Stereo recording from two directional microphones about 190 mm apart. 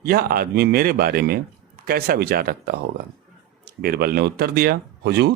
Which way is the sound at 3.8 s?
55° right (ahead or behind).